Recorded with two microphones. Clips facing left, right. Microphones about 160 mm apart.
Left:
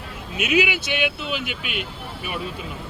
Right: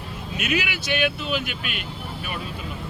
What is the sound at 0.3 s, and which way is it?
Speech, 10° left (ahead or behind).